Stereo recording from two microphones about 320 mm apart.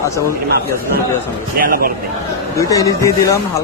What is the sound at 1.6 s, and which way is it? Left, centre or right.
Speech, right.